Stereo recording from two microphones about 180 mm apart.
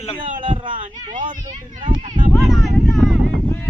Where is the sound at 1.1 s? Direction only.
45° right (ahead or behind).